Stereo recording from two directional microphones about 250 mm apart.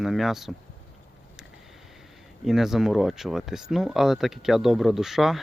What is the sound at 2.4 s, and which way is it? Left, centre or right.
Speech, centre.